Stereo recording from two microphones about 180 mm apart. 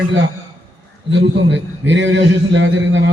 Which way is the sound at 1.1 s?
90° right.